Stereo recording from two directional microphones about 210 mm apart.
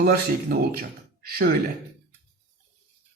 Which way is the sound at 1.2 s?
45° right (ahead or behind).